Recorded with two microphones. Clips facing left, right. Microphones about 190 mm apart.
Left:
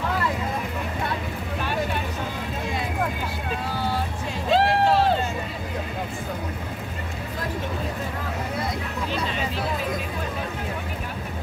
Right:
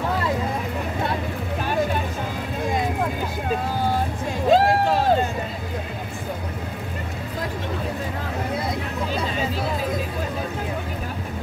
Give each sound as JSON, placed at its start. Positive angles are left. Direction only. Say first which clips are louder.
{"t": 4.5, "sound": "run", "louder": "right 2 dB", "side_deg": -45}